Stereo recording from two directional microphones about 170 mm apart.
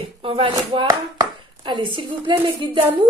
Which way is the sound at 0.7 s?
20° right (ahead or behind).